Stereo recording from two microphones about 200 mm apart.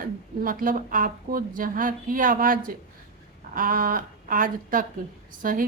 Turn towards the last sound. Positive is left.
turn(degrees=-45)  # may be behind; listen again after turning